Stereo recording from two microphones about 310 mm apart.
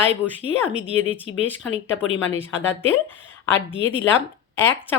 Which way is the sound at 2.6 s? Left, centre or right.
Centre.